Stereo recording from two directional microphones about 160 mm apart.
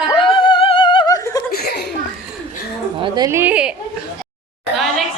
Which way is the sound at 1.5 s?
85° left.